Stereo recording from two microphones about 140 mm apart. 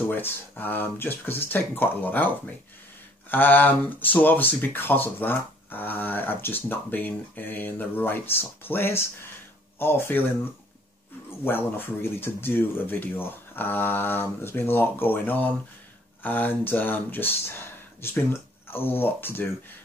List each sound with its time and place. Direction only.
0.1 s speech: 15° left (ahead or behind)
11.4 s speech: 15° left (ahead or behind)